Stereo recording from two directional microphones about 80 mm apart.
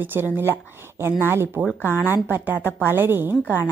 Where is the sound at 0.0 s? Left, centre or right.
Right.